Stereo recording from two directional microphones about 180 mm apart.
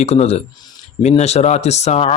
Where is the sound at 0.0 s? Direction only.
35° left (ahead or behind).